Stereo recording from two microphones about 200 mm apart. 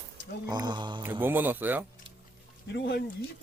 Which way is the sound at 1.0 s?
10° right (ahead or behind).